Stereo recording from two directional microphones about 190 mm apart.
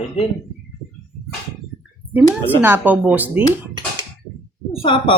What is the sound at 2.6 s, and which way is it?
Speech, 10° right (ahead or behind).